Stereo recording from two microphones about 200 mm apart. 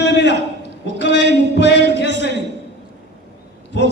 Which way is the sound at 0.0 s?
60° left (ahead or behind).